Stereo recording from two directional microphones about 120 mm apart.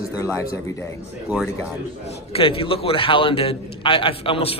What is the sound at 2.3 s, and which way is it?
A man's voice, 50° left (ahead or behind).